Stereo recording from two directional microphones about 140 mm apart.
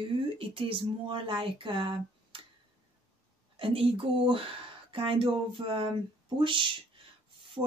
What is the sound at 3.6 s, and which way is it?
Speech, 40° right (ahead or behind).